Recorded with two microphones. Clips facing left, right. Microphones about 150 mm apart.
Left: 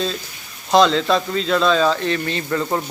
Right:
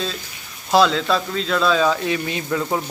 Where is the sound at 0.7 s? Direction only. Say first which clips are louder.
Left 2 dB; 5° right (ahead or behind).